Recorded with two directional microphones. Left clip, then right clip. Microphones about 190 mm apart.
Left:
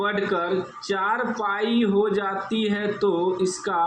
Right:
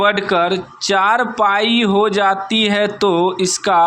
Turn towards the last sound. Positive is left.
turn(degrees=-45)  # may be behind; listen again after turning